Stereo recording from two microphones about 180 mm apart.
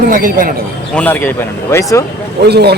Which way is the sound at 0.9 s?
10° left (ahead or behind).